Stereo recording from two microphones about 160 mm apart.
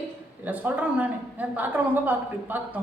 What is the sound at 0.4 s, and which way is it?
A woman's voice, 10° right (ahead or behind).